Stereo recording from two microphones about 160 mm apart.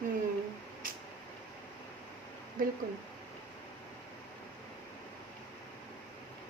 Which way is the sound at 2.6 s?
60° right (ahead or behind).